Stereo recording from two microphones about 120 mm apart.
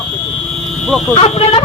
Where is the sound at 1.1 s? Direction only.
55° left (ahead or behind).